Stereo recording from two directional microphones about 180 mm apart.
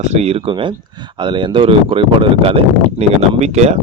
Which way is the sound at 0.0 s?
35° right (ahead or behind).